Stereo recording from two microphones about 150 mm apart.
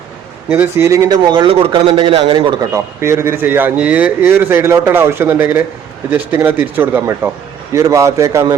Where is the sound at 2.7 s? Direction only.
20° right (ahead or behind).